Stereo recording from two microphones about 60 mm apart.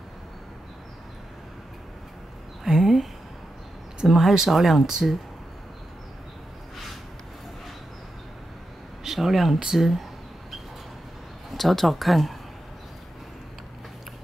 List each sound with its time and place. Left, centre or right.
2.6 s speech: centre
9.0 s speech: centre
11.5 s speech: centre